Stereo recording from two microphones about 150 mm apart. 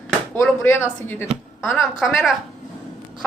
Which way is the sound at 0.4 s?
10° left (ahead or behind).